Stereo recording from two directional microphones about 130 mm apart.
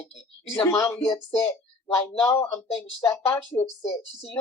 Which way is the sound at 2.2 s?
20° left (ahead or behind).